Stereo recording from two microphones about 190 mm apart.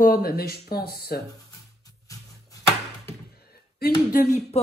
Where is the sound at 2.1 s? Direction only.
15° left (ahead or behind).